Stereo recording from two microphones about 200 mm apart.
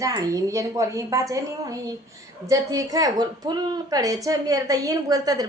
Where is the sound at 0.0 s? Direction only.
15° right (ahead or behind).